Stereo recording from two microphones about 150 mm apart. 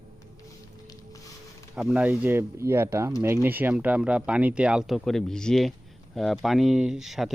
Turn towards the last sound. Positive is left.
turn(degrees=0)  # may be behind; listen again after turning